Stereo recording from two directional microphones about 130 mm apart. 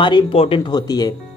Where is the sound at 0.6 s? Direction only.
30° left (ahead or behind).